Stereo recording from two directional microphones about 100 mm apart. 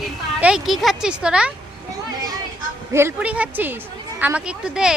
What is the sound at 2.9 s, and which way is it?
Speech, 25° right (ahead or behind).